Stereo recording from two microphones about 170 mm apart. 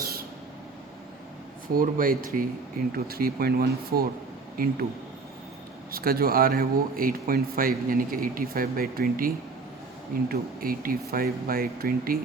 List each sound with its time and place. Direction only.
1.6 s speech: 55° right (ahead or behind)
5.9 s speech: 60° right (ahead or behind)